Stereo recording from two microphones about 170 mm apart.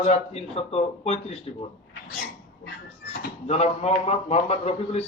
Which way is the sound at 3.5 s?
40° left (ahead or behind).